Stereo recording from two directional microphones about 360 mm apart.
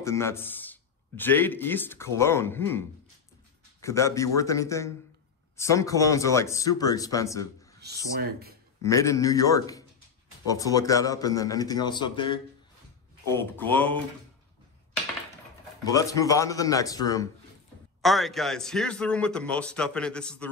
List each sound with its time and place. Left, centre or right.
0.0 s a man's voice: centre
3.8 s a man's voice: centre
7.8 s speech: right
8.8 s a man's voice: centre
15.8 s a man's voice: centre